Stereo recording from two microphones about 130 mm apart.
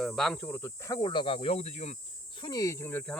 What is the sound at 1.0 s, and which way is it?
Speech, 40° left (ahead or behind).